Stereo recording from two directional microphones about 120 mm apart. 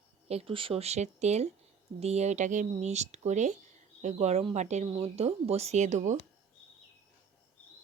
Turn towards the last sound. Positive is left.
turn(degrees=-85)